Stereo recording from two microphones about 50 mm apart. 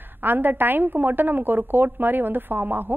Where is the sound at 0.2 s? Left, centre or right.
Right.